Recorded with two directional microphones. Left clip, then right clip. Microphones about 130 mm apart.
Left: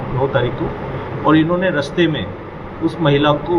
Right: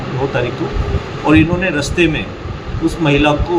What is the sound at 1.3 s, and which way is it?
A man's voice, 20° right (ahead or behind).